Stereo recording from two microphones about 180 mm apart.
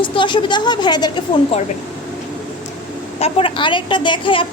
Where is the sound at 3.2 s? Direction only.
30° left (ahead or behind).